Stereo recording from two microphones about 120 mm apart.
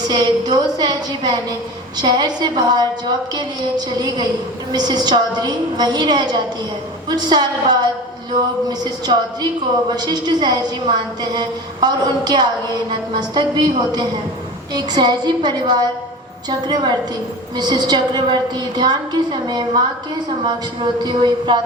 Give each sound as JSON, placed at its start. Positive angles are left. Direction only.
{"t": 0.1, "sound": "a woman's voice", "side_deg": -35}
{"t": 21.0, "sound": "a woman's voice", "side_deg": -40}